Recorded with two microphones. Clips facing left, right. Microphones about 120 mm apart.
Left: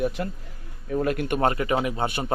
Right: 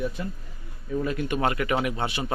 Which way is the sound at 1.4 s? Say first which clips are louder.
Left 1 dB; 35° left (ahead or behind).